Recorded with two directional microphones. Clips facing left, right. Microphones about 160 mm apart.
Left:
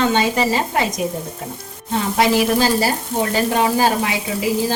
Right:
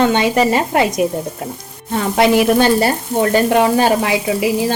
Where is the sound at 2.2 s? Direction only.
60° right (ahead or behind).